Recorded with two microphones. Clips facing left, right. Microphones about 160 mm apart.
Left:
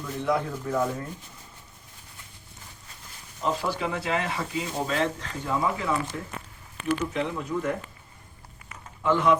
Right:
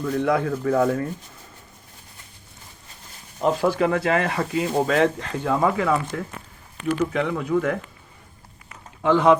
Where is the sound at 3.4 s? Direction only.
55° right (ahead or behind).